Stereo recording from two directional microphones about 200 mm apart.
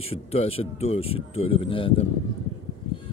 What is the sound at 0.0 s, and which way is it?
Speech, 30° left (ahead or behind).